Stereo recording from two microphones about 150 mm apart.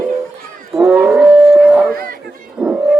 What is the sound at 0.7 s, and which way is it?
Wild animals, 10° right (ahead or behind).